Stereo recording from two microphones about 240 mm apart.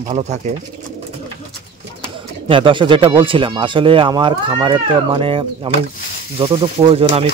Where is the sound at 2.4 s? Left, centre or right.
Right.